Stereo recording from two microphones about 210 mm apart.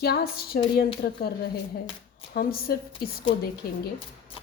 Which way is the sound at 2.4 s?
45° left (ahead or behind).